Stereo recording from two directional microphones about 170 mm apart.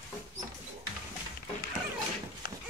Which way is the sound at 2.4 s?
60° left (ahead or behind).